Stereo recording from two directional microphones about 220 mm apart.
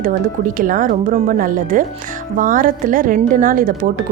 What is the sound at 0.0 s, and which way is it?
A woman's voice, 40° right (ahead or behind).